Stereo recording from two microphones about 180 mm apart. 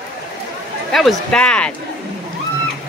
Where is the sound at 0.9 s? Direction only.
Centre (ahead or behind).